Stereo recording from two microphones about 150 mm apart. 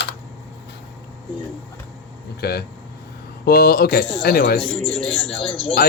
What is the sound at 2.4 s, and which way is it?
Speech, 90° left.